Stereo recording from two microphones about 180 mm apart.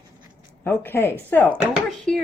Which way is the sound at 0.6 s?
10° left (ahead or behind).